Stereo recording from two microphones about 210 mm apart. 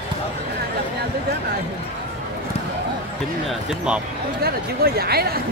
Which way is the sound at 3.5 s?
5° right (ahead or behind).